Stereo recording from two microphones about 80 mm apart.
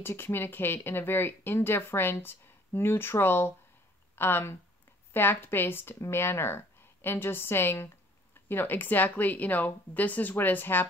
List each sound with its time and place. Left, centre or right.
0.0 s speech: left